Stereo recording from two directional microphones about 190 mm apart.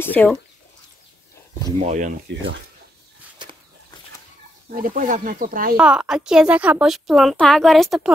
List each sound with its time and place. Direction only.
0.0 s speech: 10° left (ahead or behind)
1.8 s speech: 40° right (ahead or behind)
2.3 s speech: 75° right (ahead or behind)
3.4 s a sound: 25° right (ahead or behind)
4.6 s speech: 45° right (ahead or behind)
5.8 s speech: 5° right (ahead or behind)